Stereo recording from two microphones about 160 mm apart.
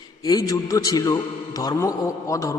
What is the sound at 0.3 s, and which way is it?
A man's voice, 25° left (ahead or behind).